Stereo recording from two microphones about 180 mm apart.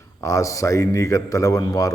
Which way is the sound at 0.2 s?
15° left (ahead or behind).